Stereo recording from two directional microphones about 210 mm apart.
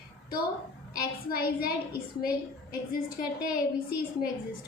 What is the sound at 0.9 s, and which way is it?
A woman's voice, 45° left (ahead or behind).